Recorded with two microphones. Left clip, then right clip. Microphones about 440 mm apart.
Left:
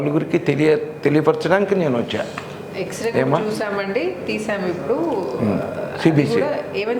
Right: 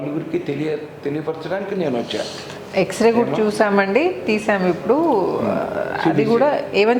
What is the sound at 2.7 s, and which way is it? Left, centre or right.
A woman's voice, right.